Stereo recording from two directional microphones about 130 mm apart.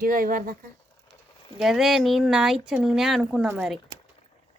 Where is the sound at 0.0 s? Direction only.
90° right.